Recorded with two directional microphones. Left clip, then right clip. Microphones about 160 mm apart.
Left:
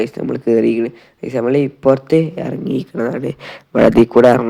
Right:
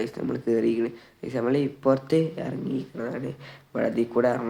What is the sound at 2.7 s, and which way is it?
Speech, 60° left (ahead or behind).